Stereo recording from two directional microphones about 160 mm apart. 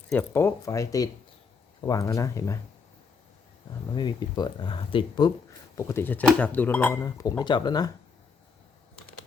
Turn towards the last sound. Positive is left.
turn(degrees=25)  # may be behind; listen again after turning